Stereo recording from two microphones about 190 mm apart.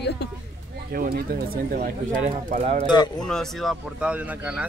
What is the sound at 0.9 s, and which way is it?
Speech, 50° right (ahead or behind).